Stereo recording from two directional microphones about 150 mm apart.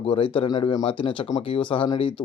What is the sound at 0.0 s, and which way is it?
Speech, 35° left (ahead or behind).